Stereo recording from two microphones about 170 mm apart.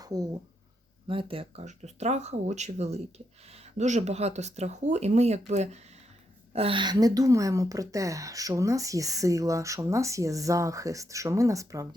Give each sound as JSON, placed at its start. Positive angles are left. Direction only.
{"t": 0.0, "sound": "a woman's voice", "side_deg": -20}